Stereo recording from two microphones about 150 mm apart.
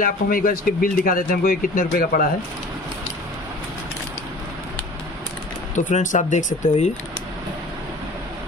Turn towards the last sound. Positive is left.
turn(degrees=55)  # may be behind; listen again after turning